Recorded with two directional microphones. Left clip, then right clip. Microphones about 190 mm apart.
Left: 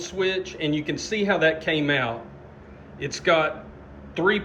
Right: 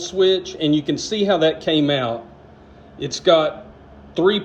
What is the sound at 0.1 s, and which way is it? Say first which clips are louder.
Speech: right 8 dB; 15° right (ahead or behind).